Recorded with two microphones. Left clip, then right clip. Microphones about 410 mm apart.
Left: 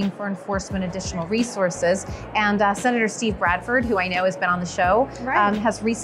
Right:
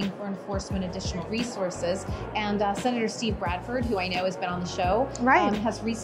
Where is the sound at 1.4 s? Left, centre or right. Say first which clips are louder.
Left 8 dB; left.